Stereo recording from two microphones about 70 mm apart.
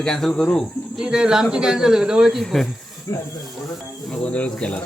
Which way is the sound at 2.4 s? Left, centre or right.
Centre.